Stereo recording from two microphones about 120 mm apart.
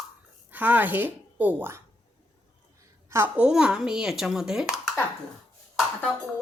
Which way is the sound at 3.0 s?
20° right (ahead or behind).